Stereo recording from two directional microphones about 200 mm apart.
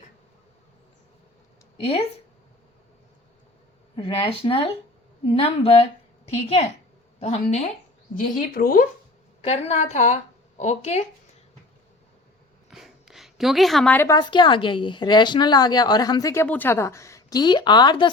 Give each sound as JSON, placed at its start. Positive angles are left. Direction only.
{"t": 3.9, "sound": "a woman's voice", "side_deg": 25}
{"t": 7.2, "sound": "a woman's voice", "side_deg": 35}
{"t": 8.1, "sound": "speech", "side_deg": 45}
{"t": 9.4, "sound": "a woman's voice", "side_deg": 35}
{"t": 12.7, "sound": "a woman's voice", "side_deg": 0}